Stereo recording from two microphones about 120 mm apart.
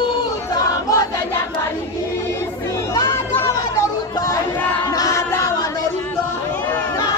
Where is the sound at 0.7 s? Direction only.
30° left (ahead or behind).